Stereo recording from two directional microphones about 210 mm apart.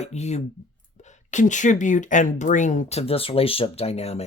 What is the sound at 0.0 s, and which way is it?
Speech, 30° left (ahead or behind).